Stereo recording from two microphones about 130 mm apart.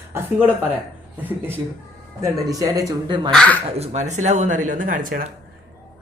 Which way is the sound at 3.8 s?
65° right (ahead or behind).